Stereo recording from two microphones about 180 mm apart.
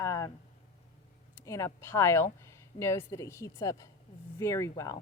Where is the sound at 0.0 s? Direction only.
15° left (ahead or behind).